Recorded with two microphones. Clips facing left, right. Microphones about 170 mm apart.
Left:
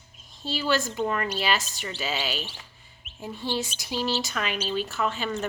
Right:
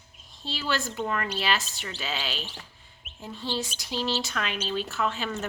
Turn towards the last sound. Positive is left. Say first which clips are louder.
# left 1 dB
turn(degrees=0)  # may be behind; listen again after turning